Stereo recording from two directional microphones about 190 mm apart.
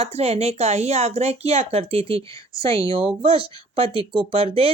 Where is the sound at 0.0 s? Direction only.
35° right (ahead or behind).